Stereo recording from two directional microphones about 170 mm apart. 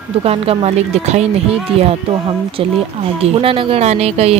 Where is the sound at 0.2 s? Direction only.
35° right (ahead or behind).